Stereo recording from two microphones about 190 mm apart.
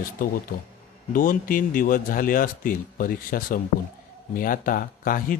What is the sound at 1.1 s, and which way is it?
A man's voice, 45° left (ahead or behind).